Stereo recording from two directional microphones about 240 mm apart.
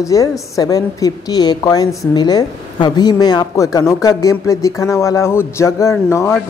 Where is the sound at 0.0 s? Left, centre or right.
Centre.